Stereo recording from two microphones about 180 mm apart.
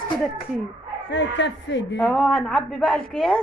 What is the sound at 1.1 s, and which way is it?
Speech, 75° left (ahead or behind).